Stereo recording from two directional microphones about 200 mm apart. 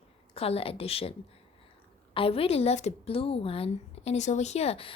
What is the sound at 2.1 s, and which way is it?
A child's voice, 25° left (ahead or behind).